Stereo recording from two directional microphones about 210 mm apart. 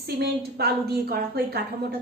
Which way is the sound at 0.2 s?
50° right (ahead or behind).